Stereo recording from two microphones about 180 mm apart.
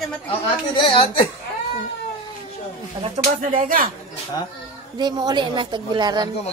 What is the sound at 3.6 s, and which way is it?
Speech, 50° right (ahead or behind).